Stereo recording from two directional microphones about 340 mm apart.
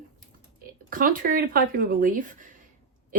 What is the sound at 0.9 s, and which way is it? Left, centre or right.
Speech, right.